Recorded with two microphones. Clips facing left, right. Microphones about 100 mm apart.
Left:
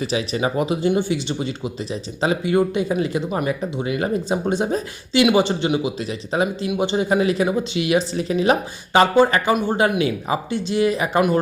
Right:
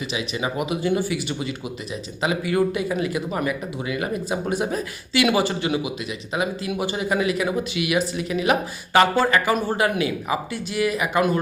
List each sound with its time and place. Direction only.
0.0 s speech: 35° left (ahead or behind)
8.9 s speech: 20° left (ahead or behind)